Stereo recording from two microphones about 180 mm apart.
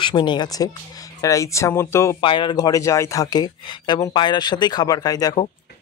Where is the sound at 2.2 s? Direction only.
25° left (ahead or behind).